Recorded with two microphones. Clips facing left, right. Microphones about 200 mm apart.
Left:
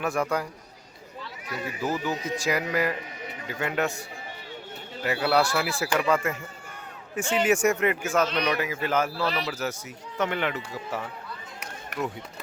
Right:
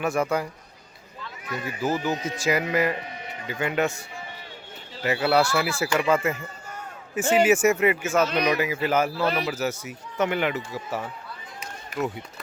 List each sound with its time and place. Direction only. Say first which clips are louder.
0.0 s a man's voice: right 2 dB; centre (ahead or behind)
2.4 s a man's voice: right 4 dB; centre (ahead or behind)
5.0 s a man's voice: right 2 dB; centre (ahead or behind)
11.9 s speech: right 3 dB; 70° left (ahead or behind)